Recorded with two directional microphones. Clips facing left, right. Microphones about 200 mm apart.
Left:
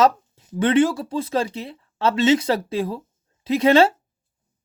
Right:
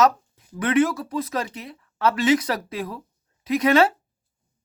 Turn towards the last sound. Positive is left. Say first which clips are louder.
# left 3 dB
turn(degrees=30)  # may be behind; listen again after turning